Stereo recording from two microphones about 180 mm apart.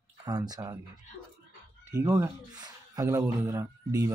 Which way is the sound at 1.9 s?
15° right (ahead or behind).